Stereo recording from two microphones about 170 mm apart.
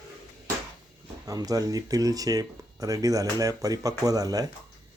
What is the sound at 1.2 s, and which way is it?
Speech, 20° right (ahead or behind).